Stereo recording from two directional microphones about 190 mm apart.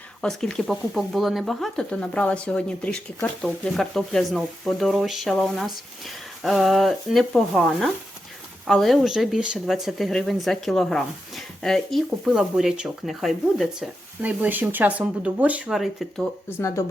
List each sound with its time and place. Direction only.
0.2 s speech: 5° left (ahead or behind)
16.6 s speech: 15° left (ahead or behind)